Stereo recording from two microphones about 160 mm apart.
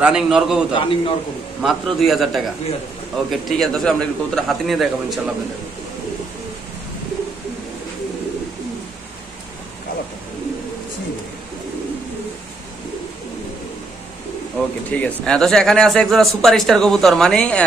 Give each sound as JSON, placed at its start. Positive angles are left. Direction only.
{"t": 0.0, "sound": "speech", "side_deg": -5}
{"t": 0.7, "sound": "a man's voice", "side_deg": 35}
{"t": 1.6, "sound": "speech", "side_deg": 0}
{"t": 14.9, "sound": "speech", "side_deg": 10}